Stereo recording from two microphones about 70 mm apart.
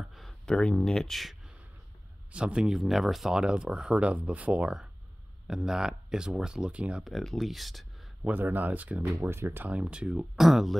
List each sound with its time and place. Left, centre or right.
0.5 s speech: centre
2.3 s speech: centre
7.1 s speech: centre
8.2 s speech: right
9.2 s speech: right
9.7 s speech: centre